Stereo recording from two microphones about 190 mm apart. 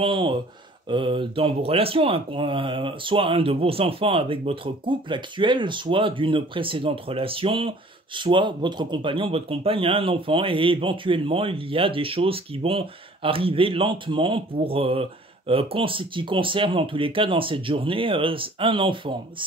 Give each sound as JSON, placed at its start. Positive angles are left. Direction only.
{"t": 0.0, "sound": "speech", "side_deg": -25}